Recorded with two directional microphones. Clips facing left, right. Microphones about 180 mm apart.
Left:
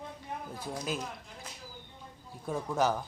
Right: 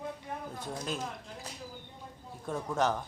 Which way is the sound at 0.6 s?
5° left (ahead or behind).